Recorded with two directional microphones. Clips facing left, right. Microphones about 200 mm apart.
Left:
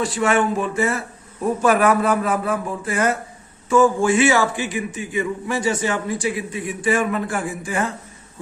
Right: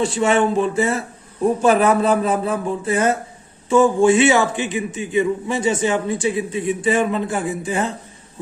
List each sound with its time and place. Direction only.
0.0 s a man's voice: 25° right (ahead or behind)